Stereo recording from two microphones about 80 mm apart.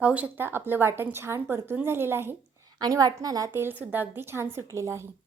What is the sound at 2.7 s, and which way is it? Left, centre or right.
Speech, right.